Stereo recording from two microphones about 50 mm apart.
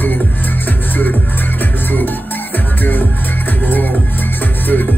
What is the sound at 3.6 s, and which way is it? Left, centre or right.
Music, left.